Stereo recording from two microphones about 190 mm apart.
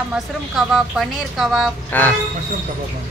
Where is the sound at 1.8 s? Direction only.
10° left (ahead or behind).